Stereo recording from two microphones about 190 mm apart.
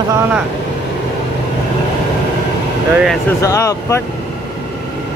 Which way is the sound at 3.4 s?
15° left (ahead or behind).